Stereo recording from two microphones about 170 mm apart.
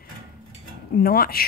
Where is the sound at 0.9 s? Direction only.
60° left (ahead or behind).